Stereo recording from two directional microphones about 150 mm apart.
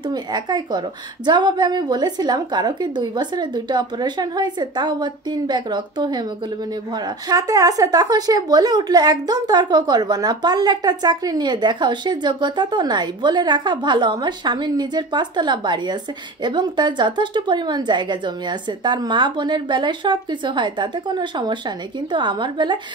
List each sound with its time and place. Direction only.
0.1 s a woman's voice: 30° right (ahead or behind)